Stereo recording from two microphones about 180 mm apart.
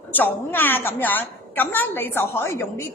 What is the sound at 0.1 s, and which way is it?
A woman's voice, 10° left (ahead or behind).